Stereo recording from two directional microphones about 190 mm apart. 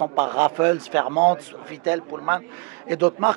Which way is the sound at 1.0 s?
25° right (ahead or behind).